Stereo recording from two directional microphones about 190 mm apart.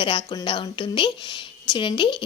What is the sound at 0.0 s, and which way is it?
Speech, 25° left (ahead or behind).